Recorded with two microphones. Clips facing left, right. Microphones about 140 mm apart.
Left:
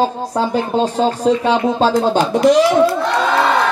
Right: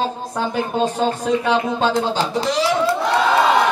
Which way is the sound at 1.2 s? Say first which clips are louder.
Left 5 dB; 35° left (ahead or behind).